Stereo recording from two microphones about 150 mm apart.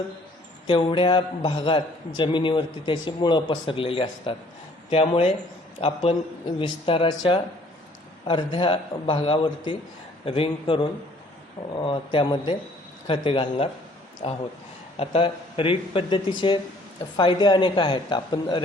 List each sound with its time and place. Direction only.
0.7 s a man's voice: 35° left (ahead or behind)
14.9 s a man's voice: 40° left (ahead or behind)